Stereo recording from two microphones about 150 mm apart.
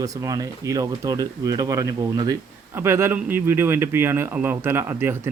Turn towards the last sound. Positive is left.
turn(degrees=-15)  # may be behind; listen again after turning